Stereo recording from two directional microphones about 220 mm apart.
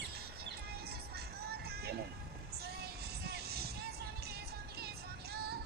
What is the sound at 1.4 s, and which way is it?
Music, 45° right (ahead or behind).